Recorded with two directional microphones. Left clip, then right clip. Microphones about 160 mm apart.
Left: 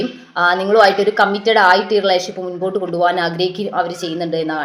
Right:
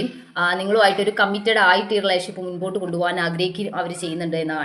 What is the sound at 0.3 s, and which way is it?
A woman's voice, 20° right (ahead or behind).